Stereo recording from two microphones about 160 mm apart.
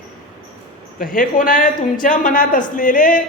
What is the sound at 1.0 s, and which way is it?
Speech, 60° left (ahead or behind).